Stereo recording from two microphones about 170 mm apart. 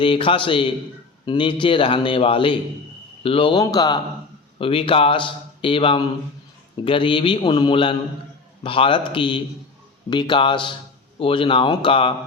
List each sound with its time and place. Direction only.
0.0 s a man's voice: 30° left (ahead or behind)